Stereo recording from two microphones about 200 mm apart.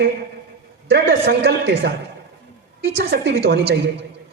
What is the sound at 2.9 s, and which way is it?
Speech, 55° right (ahead or behind).